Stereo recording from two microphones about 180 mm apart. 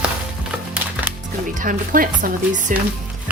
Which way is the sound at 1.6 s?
50° right (ahead or behind).